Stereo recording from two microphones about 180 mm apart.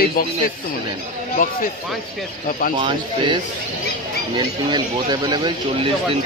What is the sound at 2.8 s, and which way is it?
Speech, 25° right (ahead or behind).